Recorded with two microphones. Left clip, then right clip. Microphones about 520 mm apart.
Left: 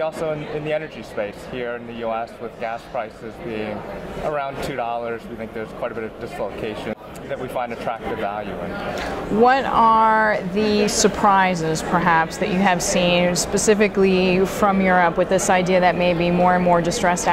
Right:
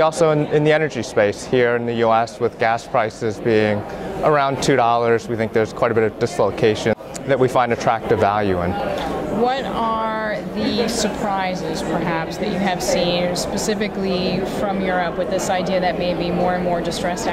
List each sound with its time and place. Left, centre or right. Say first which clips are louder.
0.0 s speech: right 8 dB; right
9.5 s speech: left 6 dB; left